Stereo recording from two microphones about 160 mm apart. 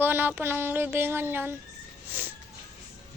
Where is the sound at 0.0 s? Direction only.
10° right (ahead or behind).